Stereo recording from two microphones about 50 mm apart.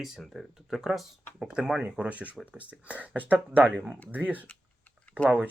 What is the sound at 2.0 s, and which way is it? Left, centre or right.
Speech, right.